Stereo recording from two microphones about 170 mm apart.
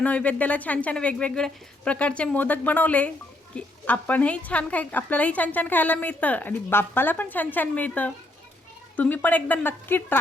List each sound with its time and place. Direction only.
0.0 s a woman's voice: 10° left (ahead or behind)